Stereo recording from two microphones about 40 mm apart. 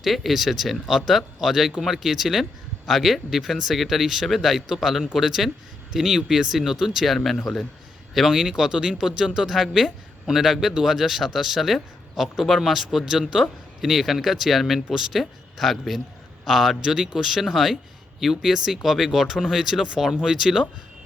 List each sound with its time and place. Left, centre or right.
0.0 s speech: centre
7.3 s speech: centre
8.3 s speech: centre
19.8 s speech: centre